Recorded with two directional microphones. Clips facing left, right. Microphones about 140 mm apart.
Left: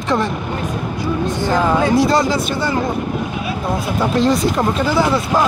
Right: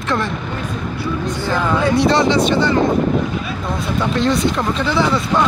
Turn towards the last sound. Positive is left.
turn(degrees=5)  # may be behind; listen again after turning